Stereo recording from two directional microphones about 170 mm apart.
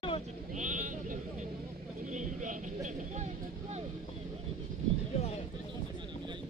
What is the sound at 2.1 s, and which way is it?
Speech, 45° right (ahead or behind).